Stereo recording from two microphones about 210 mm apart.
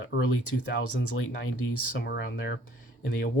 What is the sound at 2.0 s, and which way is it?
Speech, 55° left (ahead or behind).